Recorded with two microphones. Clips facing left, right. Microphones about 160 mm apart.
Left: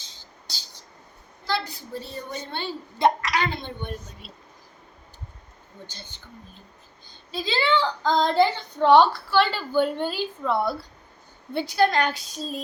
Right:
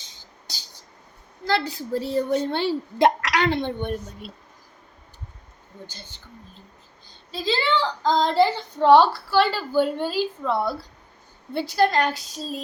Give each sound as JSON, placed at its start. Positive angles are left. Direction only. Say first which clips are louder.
{"t": 1.6, "sound": "a woman's voice", "louder": "right 9 dB", "side_deg": -90}
{"t": 5.8, "sound": "speech", "louder": "right 1 dB", "side_deg": -5}
{"t": 7.3, "sound": "speech", "louder": "even", "side_deg": 0}